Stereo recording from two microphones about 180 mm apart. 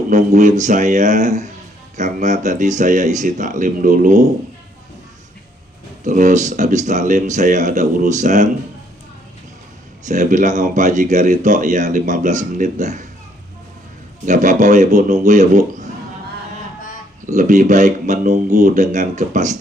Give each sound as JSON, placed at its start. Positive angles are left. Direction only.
{"t": 0.1, "sound": "speech", "side_deg": -45}
{"t": 6.1, "sound": "speech", "side_deg": -45}
{"t": 10.1, "sound": "speech", "side_deg": -45}
{"t": 14.3, "sound": "speech", "side_deg": -45}
{"t": 17.2, "sound": "speech", "side_deg": -45}